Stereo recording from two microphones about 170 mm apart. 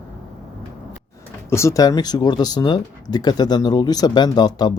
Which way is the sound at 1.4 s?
15° left (ahead or behind).